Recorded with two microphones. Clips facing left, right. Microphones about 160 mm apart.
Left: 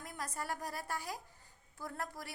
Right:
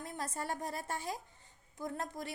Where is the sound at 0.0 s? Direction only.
25° right (ahead or behind).